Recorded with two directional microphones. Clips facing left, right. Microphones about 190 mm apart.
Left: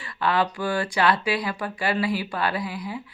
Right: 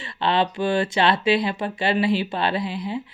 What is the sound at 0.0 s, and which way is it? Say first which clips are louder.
Speech: right 2 dB; 25° right (ahead or behind).